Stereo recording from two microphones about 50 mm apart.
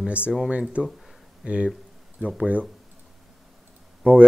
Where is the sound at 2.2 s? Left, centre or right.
Right.